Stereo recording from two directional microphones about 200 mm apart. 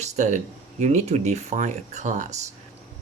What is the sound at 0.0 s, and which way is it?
Speech, 35° right (ahead or behind).